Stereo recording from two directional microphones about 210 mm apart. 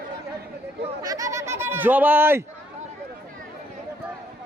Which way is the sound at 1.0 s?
15° right (ahead or behind).